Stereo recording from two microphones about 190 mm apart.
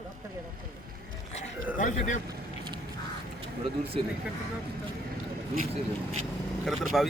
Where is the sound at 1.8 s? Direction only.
40° left (ahead or behind).